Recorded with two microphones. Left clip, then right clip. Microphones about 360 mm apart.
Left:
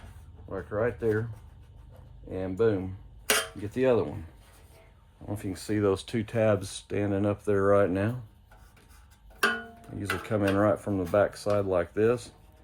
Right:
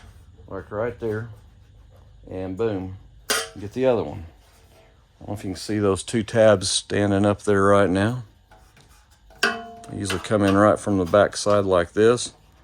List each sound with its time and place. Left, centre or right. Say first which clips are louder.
0.4 s speech: right 2 dB; centre
2.3 s speech: right 1 dB; centre
5.3 s speech: right 4 dB; right
9.4 s speech: right 4 dB; right